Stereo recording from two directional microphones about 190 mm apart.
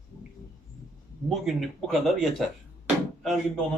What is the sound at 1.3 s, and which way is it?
Speech, centre (ahead or behind).